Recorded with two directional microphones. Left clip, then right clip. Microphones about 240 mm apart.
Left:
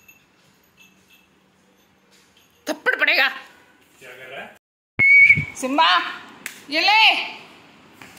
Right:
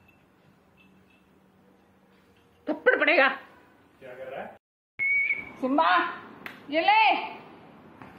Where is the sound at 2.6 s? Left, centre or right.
Centre.